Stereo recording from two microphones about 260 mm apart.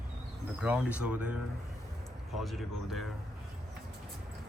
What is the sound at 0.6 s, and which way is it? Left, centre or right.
Speech, centre.